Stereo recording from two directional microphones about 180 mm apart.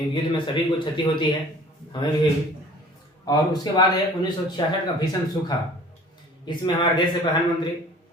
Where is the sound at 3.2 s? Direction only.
20° left (ahead or behind).